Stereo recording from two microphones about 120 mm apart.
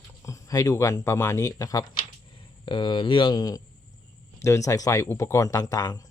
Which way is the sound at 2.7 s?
40° left (ahead or behind).